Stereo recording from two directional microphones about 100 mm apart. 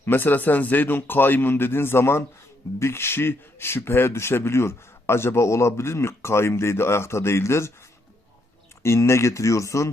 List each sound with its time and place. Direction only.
0.0 s speech: 20° left (ahead or behind)
8.8 s speech: 25° left (ahead or behind)